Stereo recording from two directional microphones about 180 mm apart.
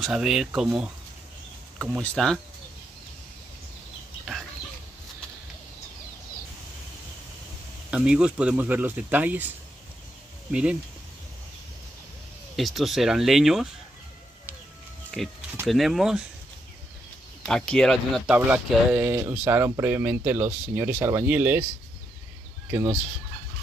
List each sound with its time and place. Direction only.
0.0 s speech: 5° right (ahead or behind)
7.9 s speech: 5° right (ahead or behind)
10.5 s speech: 5° right (ahead or behind)
12.5 s speech: centre (ahead or behind)
15.1 s speech: 5° left (ahead or behind)
17.5 s speech: 5° left (ahead or behind)
22.7 s speech: 15° right (ahead or behind)